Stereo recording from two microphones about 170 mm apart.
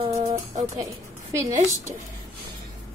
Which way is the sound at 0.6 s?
20° right (ahead or behind).